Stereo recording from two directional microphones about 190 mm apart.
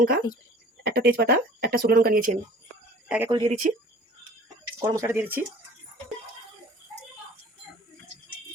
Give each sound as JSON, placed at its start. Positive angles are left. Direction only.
{"t": 0.0, "sound": "speech", "side_deg": -50}
{"t": 3.1, "sound": "speech", "side_deg": -10}
{"t": 3.6, "sound": "speech", "side_deg": -45}
{"t": 4.8, "sound": "speech", "side_deg": -15}